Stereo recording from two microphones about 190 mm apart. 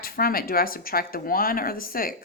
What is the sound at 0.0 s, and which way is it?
A woman's voice, 50° left (ahead or behind).